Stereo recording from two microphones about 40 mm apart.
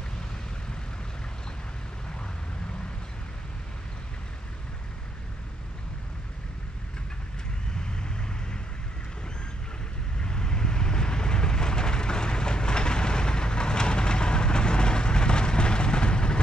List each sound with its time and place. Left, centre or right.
7.9 s vehicle: left
10.1 s vehicle: left